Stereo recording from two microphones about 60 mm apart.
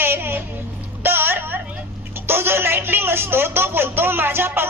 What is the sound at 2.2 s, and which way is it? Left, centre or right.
Speech, right.